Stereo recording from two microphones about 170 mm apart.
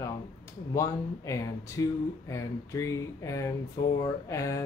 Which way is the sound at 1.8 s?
20° left (ahead or behind).